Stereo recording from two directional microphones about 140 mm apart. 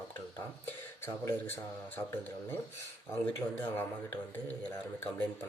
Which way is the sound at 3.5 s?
15° left (ahead or behind).